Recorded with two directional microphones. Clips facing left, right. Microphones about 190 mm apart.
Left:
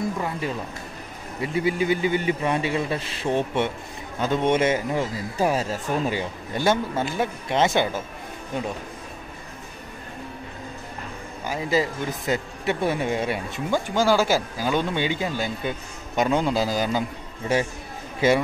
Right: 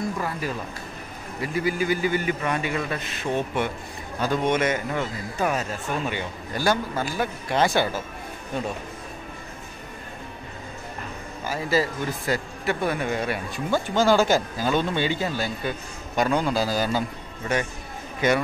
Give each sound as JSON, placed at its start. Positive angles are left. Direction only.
{"t": 0.2, "sound": "a man's voice", "side_deg": 25}
{"t": 11.4, "sound": "a man's voice", "side_deg": 15}
{"t": 18.2, "sound": "a man's voice", "side_deg": 25}